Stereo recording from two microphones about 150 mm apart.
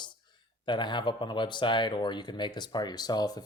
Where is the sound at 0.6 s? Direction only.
30° left (ahead or behind).